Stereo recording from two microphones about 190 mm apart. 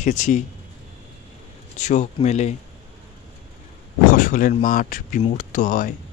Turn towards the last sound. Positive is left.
turn(degrees=40)  # may be behind; listen again after turning